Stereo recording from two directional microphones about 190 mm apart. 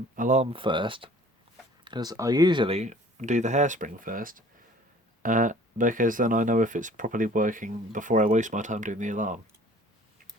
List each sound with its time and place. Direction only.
0.2 s speech: 40° right (ahead or behind)
0.5 s speech: 25° right (ahead or behind); by 9.4 s 40° right (ahead or behind)